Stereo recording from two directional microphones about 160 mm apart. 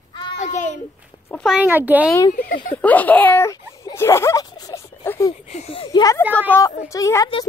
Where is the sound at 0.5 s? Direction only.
50° left (ahead or behind).